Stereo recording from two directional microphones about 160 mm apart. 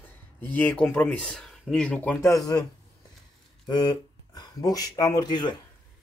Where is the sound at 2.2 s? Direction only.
20° left (ahead or behind).